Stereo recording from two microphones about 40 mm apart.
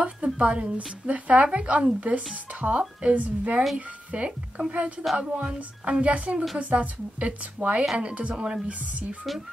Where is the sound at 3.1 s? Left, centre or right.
Right.